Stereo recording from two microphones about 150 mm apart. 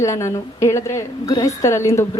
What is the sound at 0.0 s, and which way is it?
A woman's voice, 20° left (ahead or behind).